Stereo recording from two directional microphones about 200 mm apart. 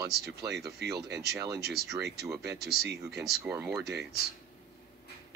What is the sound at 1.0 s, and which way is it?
Speech, 55° right (ahead or behind).